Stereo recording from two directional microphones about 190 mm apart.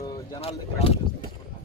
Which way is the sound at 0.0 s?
15° left (ahead or behind).